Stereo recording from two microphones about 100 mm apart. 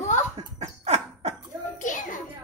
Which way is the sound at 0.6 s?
90° right.